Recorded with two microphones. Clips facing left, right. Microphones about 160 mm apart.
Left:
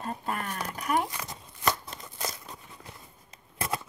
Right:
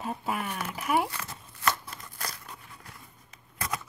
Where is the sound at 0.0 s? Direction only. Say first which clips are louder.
Right 1 dB; 5° right (ahead or behind).